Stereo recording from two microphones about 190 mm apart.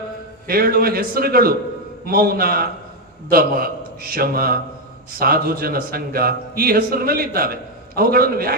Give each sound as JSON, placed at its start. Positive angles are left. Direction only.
{"t": 0.4, "sound": "a man's voice", "side_deg": -50}